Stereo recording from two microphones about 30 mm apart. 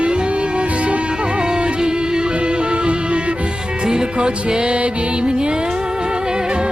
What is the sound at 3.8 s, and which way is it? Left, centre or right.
Music, right.